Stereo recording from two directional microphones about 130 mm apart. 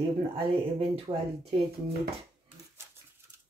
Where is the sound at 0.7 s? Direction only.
45° right (ahead or behind).